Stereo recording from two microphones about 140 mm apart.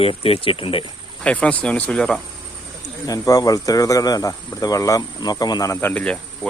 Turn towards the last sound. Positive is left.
turn(degrees=5)  # may be behind; listen again after turning